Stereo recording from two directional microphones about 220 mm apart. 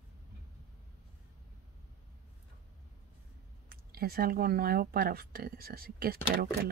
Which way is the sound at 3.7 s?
45° right (ahead or behind).